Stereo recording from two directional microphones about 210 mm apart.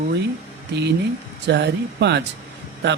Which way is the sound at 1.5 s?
55° right (ahead or behind).